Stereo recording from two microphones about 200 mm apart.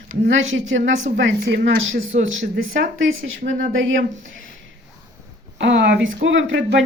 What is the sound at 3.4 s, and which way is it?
Speech, 40° right (ahead or behind).